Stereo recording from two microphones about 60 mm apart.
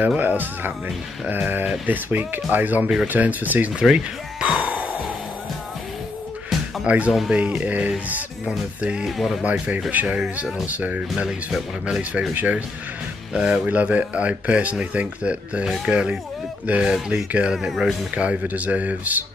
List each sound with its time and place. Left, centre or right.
0.2 s speech: right
3.8 s a sound: centre
6.8 s music: centre
7.2 s speech: right
8.5 s music: centre
9.4 s speech: right
17.6 s speech: centre
18.1 s speech: right